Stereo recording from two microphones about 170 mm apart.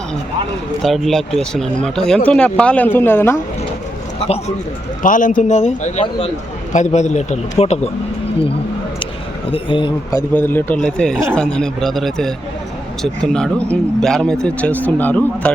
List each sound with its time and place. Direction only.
0.8 s speech: centre (ahead or behind)
5.0 s a man's voice: 50° left (ahead or behind)
9.5 s a man's voice: 30° left (ahead or behind)
10.1 s speech: 15° left (ahead or behind)